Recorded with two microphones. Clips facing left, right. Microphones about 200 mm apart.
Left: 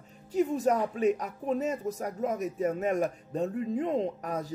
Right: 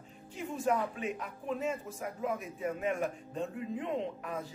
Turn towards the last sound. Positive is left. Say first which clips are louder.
# left 6 dB
turn(degrees=40)  # may be behind; listen again after turning